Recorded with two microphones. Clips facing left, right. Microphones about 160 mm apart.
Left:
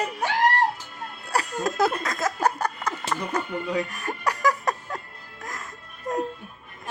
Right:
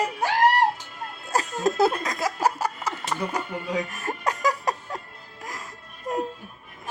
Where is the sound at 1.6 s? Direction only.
25° right (ahead or behind).